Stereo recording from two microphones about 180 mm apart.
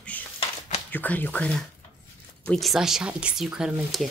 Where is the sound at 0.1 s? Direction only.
10° left (ahead or behind).